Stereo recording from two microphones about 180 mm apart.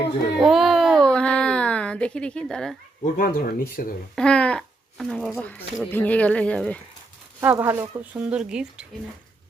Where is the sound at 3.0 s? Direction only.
50° left (ahead or behind).